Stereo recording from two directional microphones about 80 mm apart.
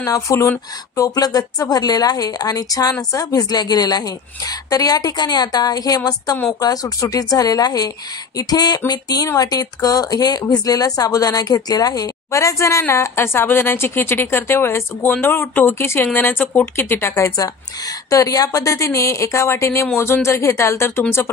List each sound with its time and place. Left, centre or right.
0.0 s a woman's voice: left
17.4 s a woman's voice: left